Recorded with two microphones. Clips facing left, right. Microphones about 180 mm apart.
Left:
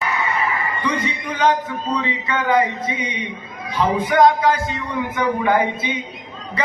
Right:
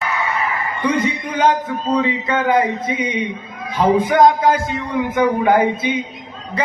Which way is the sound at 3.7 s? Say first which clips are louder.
Right 3 dB; 50° right (ahead or behind).